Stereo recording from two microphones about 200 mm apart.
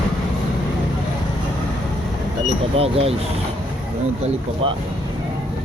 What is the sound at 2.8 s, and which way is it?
Speech, 30° right (ahead or behind).